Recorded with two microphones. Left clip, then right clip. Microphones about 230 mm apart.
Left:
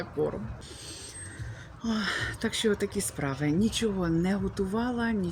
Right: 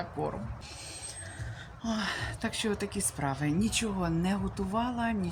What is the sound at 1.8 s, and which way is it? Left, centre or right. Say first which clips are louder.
A woman's voice: left 3 dB; centre.